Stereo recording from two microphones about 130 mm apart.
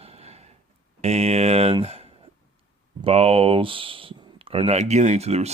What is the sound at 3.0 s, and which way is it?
Speech, 50° right (ahead or behind).